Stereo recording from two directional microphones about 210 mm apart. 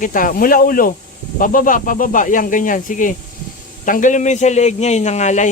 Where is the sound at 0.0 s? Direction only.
40° left (ahead or behind).